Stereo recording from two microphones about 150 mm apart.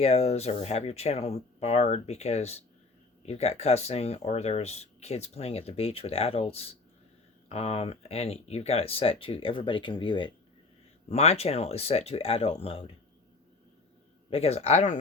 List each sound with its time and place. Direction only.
0.0 s speech: 45° left (ahead or behind)
11.1 s speech: 45° left (ahead or behind)
14.3 s speech: 40° left (ahead or behind)